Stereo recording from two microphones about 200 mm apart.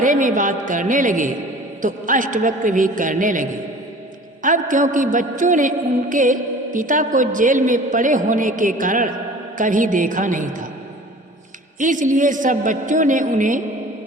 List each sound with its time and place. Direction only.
0.0 s a man's voice: 40° right (ahead or behind)
11.8 s a man's voice: 40° right (ahead or behind)